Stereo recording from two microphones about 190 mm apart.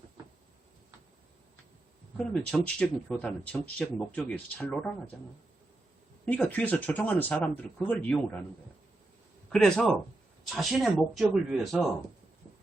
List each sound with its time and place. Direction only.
2.1 s speech: 5° left (ahead or behind)
6.2 s speech: 10° left (ahead or behind)
9.5 s speech: 5° left (ahead or behind)